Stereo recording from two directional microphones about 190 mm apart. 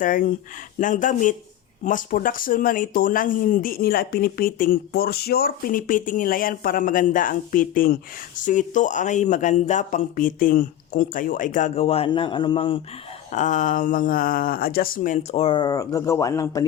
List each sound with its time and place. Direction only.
0.0 s speech: 45° left (ahead or behind); by 12.8 s 30° left (ahead or behind)
13.3 s speech: 40° left (ahead or behind); by 16.6 s 15° left (ahead or behind)